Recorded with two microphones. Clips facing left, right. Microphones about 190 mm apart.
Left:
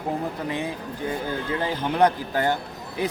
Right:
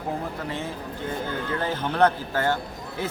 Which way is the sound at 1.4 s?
10° left (ahead or behind).